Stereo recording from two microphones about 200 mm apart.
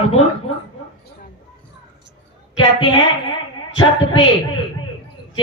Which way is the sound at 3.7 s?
25° left (ahead or behind).